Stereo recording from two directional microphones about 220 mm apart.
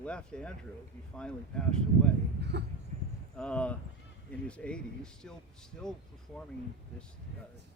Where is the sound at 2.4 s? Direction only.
50° right (ahead or behind).